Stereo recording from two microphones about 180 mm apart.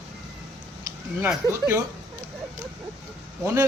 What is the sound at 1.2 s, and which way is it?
Speech, 15° right (ahead or behind).